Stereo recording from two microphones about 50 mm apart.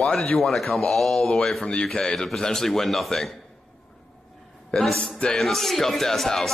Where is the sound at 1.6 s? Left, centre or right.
Centre.